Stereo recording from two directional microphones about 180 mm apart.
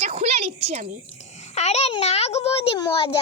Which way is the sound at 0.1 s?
40° right (ahead or behind).